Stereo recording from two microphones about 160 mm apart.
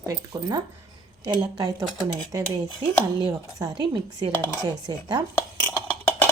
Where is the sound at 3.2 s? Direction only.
20° right (ahead or behind).